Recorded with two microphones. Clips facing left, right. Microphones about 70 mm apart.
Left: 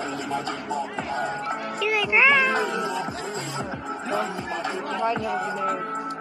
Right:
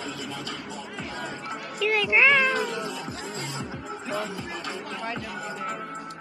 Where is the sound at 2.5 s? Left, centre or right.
Left.